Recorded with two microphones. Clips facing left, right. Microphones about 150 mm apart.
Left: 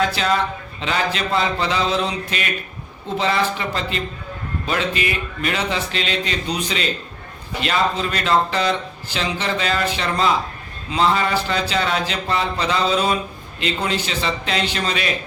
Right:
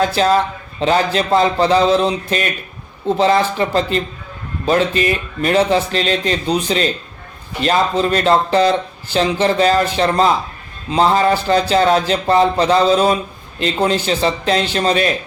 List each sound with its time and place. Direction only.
0.2 s speech: 40° right (ahead or behind)